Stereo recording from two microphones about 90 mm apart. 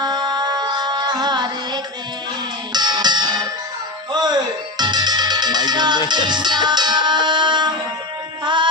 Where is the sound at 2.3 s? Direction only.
55° right (ahead or behind).